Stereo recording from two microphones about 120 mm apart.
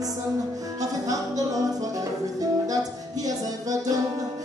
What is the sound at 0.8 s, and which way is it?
Music, 30° right (ahead or behind).